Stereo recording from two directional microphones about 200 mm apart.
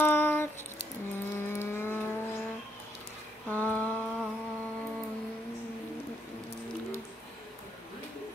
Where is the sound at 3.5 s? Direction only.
10° left (ahead or behind).